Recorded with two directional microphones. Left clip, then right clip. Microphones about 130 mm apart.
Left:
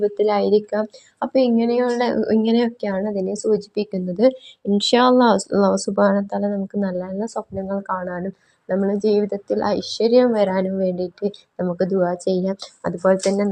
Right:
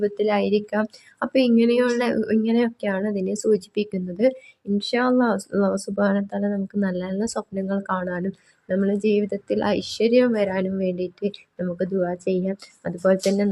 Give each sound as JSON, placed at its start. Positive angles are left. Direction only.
{"t": 0.0, "sound": "speech", "side_deg": 5}
{"t": 2.4, "sound": "speech", "side_deg": 25}
{"t": 4.1, "sound": "speech", "side_deg": 15}
{"t": 4.8, "sound": "speech", "side_deg": 30}
{"t": 6.7, "sound": "speech", "side_deg": -10}
{"t": 13.0, "sound": "speech", "side_deg": -5}